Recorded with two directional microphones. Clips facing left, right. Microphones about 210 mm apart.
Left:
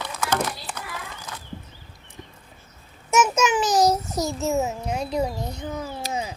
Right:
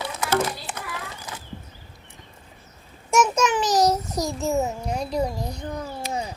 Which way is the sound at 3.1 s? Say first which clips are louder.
Even; 5° left (ahead or behind).